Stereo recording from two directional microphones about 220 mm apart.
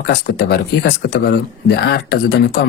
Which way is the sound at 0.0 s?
50° left (ahead or behind).